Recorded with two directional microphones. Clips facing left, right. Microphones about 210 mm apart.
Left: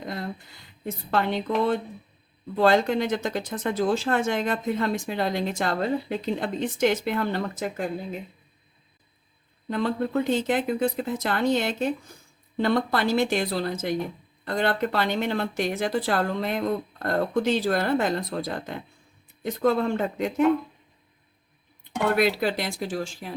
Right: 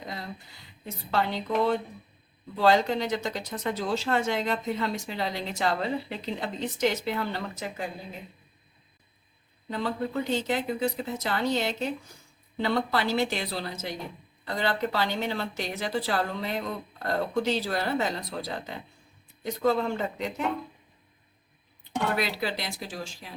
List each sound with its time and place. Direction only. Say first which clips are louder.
0.9 s speech: left 3 dB; 50° left (ahead or behind)
9.6 s speech: left 4 dB; 55° left (ahead or behind)
22.2 s speech: left 7 dB; 50° left (ahead or behind)